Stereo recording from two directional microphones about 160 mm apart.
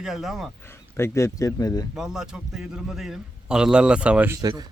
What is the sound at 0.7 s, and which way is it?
Speech, 15° left (ahead or behind).